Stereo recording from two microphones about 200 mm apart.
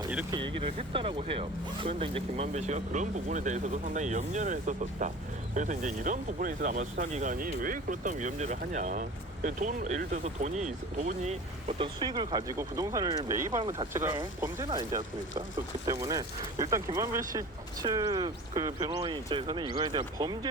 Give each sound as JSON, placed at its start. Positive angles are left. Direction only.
{"t": 0.3, "sound": "speech", "side_deg": -25}
{"t": 11.8, "sound": "speech", "side_deg": -20}